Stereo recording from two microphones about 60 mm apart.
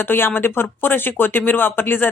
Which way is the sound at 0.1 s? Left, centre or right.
Left.